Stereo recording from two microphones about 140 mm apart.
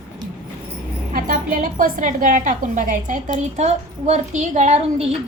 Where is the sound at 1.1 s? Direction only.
75° right (ahead or behind).